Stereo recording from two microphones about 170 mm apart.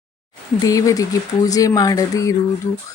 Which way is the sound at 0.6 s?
20° left (ahead or behind).